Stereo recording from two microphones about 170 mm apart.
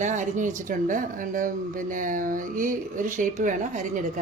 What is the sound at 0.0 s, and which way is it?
Speech, 45° right (ahead or behind).